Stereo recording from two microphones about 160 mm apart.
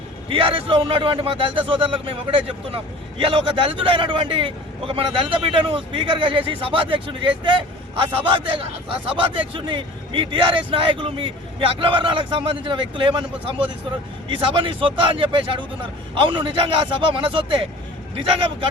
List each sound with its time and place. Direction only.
0.3 s speech: 35° right (ahead or behind)